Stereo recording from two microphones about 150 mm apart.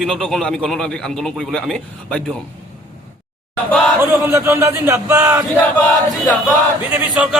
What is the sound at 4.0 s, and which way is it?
Speech, 15° right (ahead or behind).